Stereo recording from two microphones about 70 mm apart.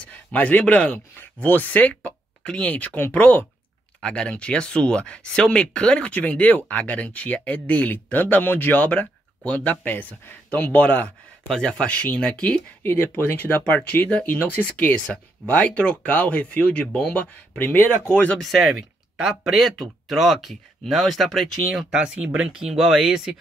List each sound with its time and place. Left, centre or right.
0.0 s speech: left
11.4 s speech: centre
12.8 s speech: left
18.4 s speech: centre
21.9 s speech: centre